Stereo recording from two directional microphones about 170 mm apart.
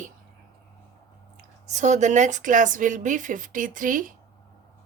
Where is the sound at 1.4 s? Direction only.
45° right (ahead or behind).